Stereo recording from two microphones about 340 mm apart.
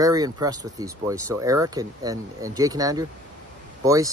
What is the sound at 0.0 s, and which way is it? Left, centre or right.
Speech, centre.